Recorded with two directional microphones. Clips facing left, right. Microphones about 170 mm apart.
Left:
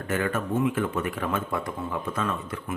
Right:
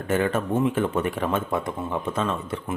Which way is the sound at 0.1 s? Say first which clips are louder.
Right 4 dB; 30° right (ahead or behind).